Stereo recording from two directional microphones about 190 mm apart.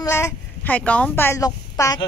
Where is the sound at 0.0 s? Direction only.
15° left (ahead or behind).